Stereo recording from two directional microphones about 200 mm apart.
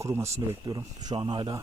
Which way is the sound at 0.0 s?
15° right (ahead or behind).